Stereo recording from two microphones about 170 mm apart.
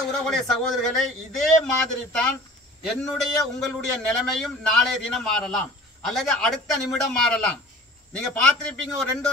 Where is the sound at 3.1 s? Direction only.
Centre (ahead or behind).